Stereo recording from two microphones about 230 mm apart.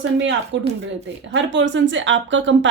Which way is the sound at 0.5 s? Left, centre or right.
Right.